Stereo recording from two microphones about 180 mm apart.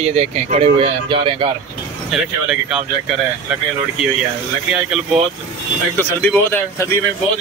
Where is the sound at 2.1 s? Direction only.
5° right (ahead or behind).